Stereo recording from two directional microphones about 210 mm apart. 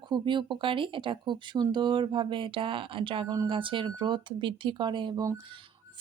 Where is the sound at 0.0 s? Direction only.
20° right (ahead or behind).